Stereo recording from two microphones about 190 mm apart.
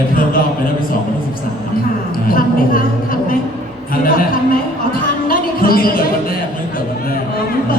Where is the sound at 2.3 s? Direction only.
50° left (ahead or behind).